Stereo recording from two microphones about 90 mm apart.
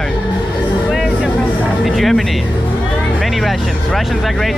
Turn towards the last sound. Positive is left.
turn(degrees=0)  # may be behind; listen again after turning